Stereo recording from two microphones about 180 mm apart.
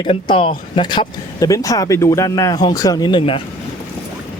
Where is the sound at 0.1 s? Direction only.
30° left (ahead or behind).